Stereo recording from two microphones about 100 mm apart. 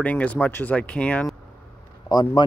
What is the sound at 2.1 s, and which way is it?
Speech, 45° left (ahead or behind).